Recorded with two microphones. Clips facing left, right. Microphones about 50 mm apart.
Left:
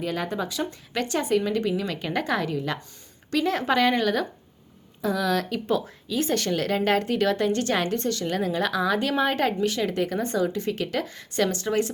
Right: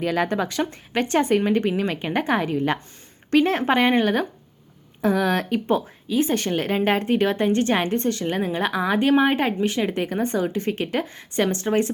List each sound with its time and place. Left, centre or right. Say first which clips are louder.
0.0 s speech: right 5 dB; right
0.9 s a woman's voice: right 4 dB; right